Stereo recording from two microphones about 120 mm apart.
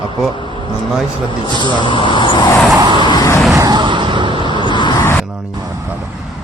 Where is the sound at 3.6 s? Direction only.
35° right (ahead or behind).